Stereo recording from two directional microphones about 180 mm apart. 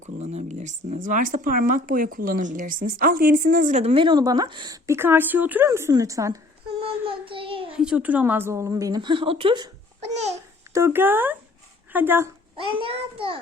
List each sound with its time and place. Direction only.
0.0 s a sound: 40° right (ahead or behind)
0.9 s speech: 45° right (ahead or behind); by 6.4 s 15° right (ahead or behind)
6.7 s child singing: 30° right (ahead or behind)
7.7 s a woman's voice: 5° right (ahead or behind); by 9.6 s 30° right (ahead or behind)
10.1 s babbling: 40° right (ahead or behind)
10.8 s a woman's voice: 15° right (ahead or behind)
12.8 s a child's voice: 30° right (ahead or behind)